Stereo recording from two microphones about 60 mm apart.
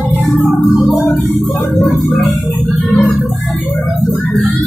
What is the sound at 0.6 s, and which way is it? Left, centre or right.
Music, left.